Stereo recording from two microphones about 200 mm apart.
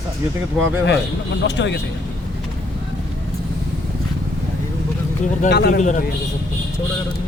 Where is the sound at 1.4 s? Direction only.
60° left (ahead or behind).